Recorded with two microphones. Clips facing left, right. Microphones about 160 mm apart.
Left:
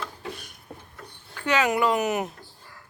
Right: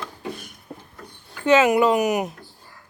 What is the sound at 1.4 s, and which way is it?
Speech, 20° right (ahead or behind).